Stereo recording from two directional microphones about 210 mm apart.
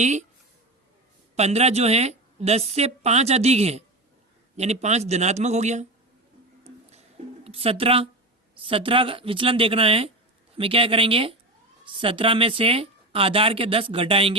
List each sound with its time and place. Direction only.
0.0 s a woman's voice: 35° right (ahead or behind)
1.4 s a woman's voice: 30° right (ahead or behind)
7.4 s speech: 30° right (ahead or behind)